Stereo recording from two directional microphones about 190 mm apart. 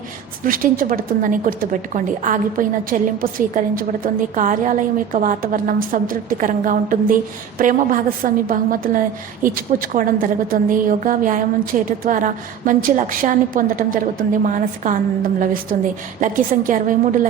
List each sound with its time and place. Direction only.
0.4 s a woman's voice: 45° right (ahead or behind)